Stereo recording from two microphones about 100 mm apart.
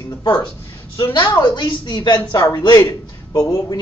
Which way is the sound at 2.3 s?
40° left (ahead or behind).